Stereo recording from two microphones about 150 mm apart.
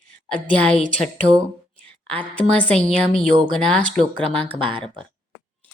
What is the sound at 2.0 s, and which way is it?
A woman's voice, 10° left (ahead or behind).